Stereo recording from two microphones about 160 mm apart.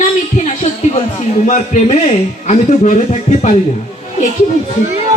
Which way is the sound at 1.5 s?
50° left (ahead or behind).